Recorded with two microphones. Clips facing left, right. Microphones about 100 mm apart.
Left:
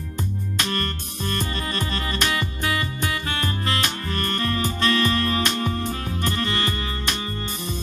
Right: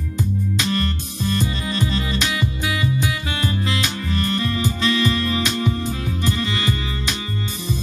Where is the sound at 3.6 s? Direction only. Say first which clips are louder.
Right 2 dB; 50° left (ahead or behind).